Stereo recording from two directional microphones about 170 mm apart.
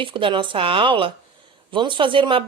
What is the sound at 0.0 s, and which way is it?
Speech, 30° right (ahead or behind).